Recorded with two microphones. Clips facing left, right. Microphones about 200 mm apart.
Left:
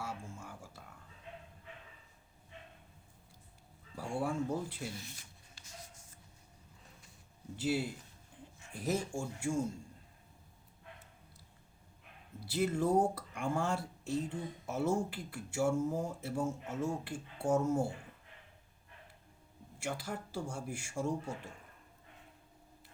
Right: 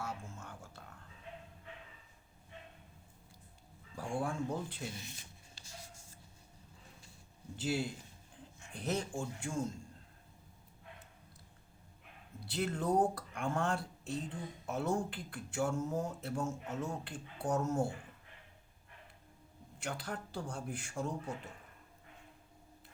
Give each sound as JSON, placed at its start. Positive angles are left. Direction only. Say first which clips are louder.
{"t": 0.0, "sound": "a sound", "louder": "even", "side_deg": 10}
{"t": 3.9, "sound": "speech", "louder": "left 2 dB", "side_deg": 5}
{"t": 4.9, "sound": "a sound", "louder": "even", "side_deg": -25}
{"t": 7.5, "sound": "a man's voice", "louder": "left 2 dB", "side_deg": 5}
{"t": 12.5, "sound": "speech", "louder": "left 2 dB", "side_deg": 5}
{"t": 19.8, "sound": "speech", "louder": "left 2 dB", "side_deg": 10}